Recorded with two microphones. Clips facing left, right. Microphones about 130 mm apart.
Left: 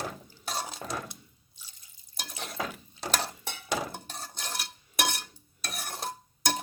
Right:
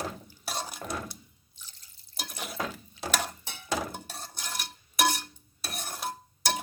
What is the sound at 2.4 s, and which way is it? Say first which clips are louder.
Water: even; 5° right (ahead or behind).